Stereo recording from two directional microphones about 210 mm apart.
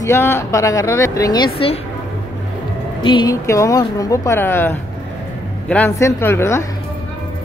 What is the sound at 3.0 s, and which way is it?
Speech, 20° left (ahead or behind).